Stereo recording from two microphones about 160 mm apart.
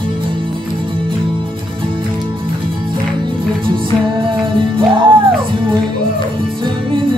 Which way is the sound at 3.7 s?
30° right (ahead or behind).